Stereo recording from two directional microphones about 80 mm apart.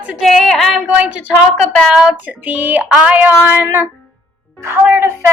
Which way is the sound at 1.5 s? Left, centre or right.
Centre.